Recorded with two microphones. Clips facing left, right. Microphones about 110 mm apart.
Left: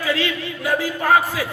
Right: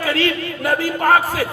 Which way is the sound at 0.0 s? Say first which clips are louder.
Right 3 dB; 45° right (ahead or behind).